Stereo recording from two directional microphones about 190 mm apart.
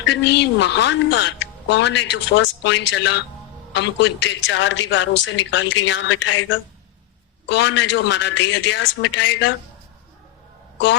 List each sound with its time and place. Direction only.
0.0 s a woman's voice: 70° left (ahead or behind)
7.4 s a woman's voice: 65° left (ahead or behind)